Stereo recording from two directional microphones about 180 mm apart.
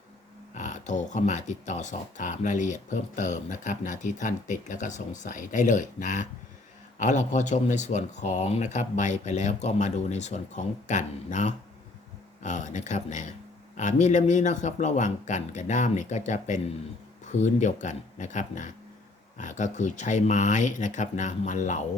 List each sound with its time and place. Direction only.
0.5 s speech: 45° left (ahead or behind)